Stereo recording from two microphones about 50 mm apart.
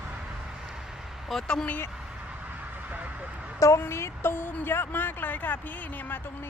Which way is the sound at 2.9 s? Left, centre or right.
Right.